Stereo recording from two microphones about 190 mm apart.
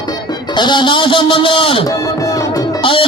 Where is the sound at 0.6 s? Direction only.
25° left (ahead or behind).